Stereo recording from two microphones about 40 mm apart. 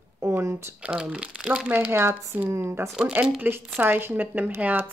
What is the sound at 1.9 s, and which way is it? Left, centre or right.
Speech, right.